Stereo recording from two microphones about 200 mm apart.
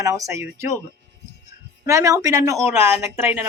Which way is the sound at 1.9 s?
15° right (ahead or behind).